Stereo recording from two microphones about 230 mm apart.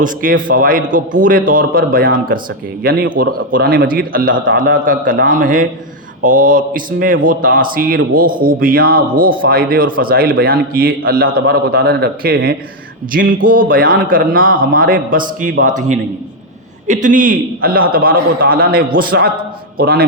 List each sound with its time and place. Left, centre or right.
0.0 s a man's voice: right